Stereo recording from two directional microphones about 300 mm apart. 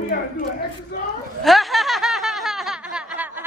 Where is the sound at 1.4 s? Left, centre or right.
Centre.